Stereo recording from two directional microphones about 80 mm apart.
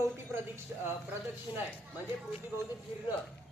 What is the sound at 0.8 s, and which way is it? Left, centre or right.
Speech, right.